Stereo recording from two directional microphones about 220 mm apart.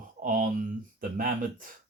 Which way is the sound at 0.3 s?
40° right (ahead or behind).